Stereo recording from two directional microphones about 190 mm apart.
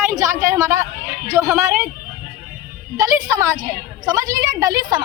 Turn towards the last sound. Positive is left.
turn(degrees=-20)  # may be behind; listen again after turning